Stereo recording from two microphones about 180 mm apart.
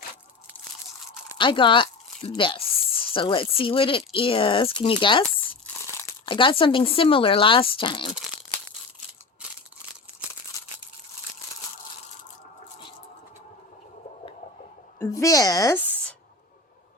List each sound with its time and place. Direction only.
1.4 s speech: 25° left (ahead or behind)
5.2 s crumpling: 5° left (ahead or behind)
6.2 s speech: 30° left (ahead or behind)
14.9 s speech: 15° left (ahead or behind)